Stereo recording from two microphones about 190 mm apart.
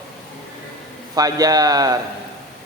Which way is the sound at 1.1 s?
20° right (ahead or behind).